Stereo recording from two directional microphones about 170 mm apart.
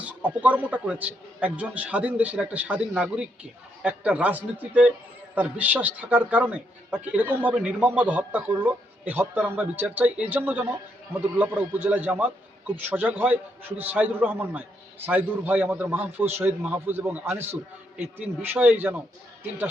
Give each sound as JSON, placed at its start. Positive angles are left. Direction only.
{"t": 0.0, "sound": "a man's voice", "side_deg": -10}